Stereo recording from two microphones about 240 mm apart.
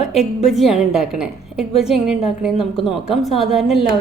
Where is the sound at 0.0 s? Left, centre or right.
Left.